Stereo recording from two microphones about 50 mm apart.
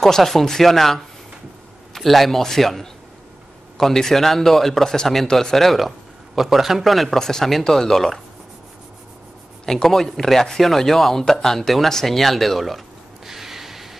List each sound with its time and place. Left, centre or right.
0.0 s speech: centre
9.7 s speech: centre
13.3 s a sound: centre